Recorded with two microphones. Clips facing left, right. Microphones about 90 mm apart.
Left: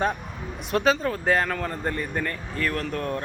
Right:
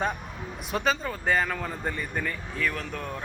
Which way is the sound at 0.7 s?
Centre (ahead or behind).